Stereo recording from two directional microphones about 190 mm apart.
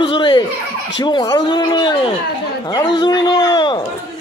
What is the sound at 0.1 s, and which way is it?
Laughter, 25° left (ahead or behind).